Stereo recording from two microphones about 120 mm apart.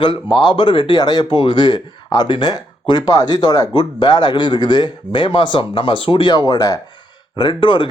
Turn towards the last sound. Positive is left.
turn(degrees=45)  # may be behind; listen again after turning